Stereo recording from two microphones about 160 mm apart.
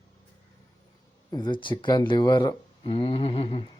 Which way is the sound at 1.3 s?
30° left (ahead or behind).